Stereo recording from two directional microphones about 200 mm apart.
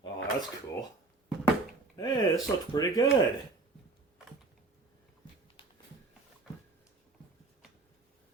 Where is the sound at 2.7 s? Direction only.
20° left (ahead or behind).